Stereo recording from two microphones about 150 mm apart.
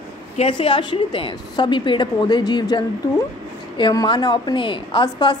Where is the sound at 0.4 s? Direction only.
35° left (ahead or behind).